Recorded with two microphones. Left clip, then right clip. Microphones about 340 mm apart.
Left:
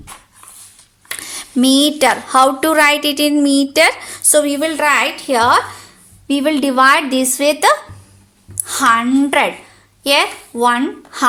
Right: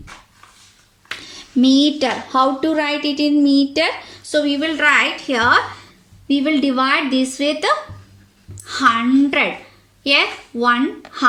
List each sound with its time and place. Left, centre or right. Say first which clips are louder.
1.2 s a woman's voice: left 1 dB; left
8.6 s a sound: left 3 dB; centre
9.0 s a woman's voice: left 2 dB; centre